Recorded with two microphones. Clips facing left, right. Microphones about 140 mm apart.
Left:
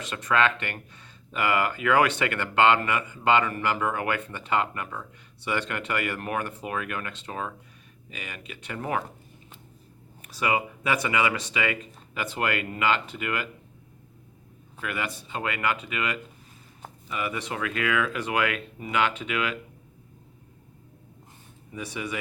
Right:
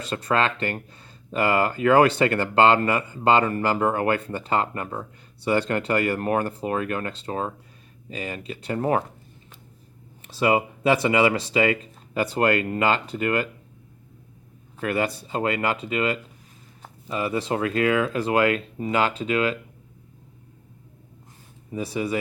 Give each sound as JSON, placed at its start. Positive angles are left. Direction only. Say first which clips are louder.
{"t": 0.0, "sound": "speech", "louder": "right 1 dB", "side_deg": -35}
{"t": 10.2, "sound": "speech", "louder": "right 6 dB", "side_deg": -30}
{"t": 14.8, "sound": "speech", "louder": "right 8 dB", "side_deg": -35}
{"t": 21.7, "sound": "speech", "louder": "right 7 dB", "side_deg": -35}